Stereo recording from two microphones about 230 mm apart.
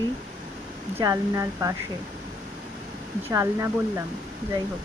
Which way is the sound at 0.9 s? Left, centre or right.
Centre.